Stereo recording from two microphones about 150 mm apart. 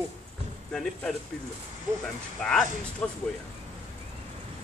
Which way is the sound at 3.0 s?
10° left (ahead or behind).